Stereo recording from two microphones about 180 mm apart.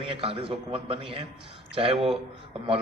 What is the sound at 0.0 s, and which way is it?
A man's voice, 30° right (ahead or behind).